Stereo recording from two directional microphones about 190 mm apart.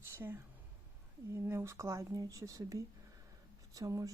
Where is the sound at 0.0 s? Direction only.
10° right (ahead or behind).